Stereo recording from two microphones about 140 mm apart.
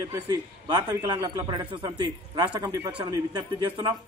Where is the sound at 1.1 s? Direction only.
30° right (ahead or behind).